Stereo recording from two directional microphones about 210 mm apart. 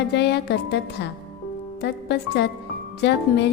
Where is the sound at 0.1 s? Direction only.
55° left (ahead or behind).